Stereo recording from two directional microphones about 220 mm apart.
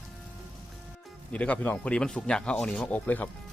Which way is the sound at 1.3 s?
5° left (ahead or behind).